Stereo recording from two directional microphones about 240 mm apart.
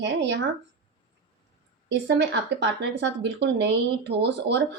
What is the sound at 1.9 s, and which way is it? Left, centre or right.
Speech, right.